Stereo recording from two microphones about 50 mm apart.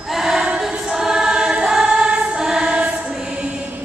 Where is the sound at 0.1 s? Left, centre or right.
Centre.